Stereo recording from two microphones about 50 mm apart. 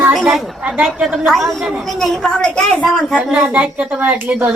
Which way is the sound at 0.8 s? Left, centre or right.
Centre.